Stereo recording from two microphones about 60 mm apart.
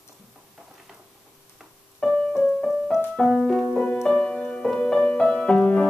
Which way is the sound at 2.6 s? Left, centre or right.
Centre.